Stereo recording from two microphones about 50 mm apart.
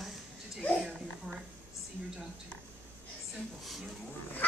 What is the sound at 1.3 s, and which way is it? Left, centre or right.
Speech, centre.